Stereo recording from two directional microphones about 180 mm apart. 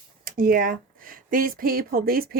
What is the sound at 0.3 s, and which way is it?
Speech, 50° right (ahead or behind).